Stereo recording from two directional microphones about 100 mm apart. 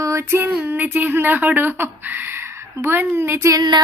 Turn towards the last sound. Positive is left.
turn(degrees=-30)  # may be behind; listen again after turning